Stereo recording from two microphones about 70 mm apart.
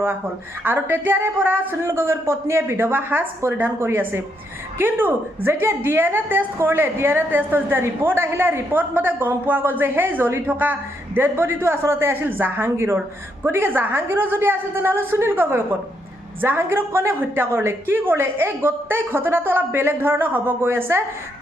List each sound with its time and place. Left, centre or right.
0.6 s a woman's voice: right
12.6 s a woman's voice: right